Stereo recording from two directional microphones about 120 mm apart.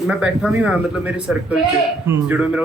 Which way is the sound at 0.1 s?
10° right (ahead or behind).